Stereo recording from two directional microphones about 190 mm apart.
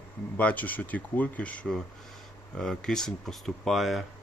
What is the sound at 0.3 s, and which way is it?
Speech, 10° left (ahead or behind).